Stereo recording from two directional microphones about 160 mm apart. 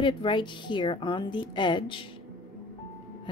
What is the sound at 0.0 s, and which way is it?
Speech, 30° left (ahead or behind).